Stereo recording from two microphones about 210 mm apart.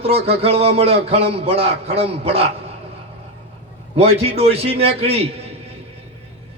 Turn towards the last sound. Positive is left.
turn(degrees=-30)  # may be behind; listen again after turning